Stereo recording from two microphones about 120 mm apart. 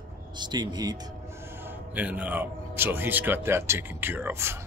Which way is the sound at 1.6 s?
15° right (ahead or behind).